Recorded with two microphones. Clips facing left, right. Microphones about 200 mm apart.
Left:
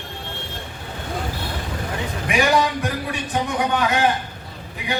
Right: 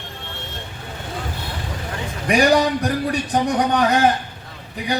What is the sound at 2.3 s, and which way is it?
A man's voice, 40° right (ahead or behind).